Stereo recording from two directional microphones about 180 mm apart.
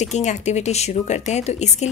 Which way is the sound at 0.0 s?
40° left (ahead or behind).